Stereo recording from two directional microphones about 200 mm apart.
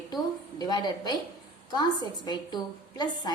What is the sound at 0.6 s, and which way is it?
A woman's voice, 20° left (ahead or behind).